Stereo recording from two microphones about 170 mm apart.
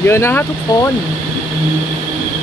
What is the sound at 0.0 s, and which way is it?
Speech, 15° left (ahead or behind).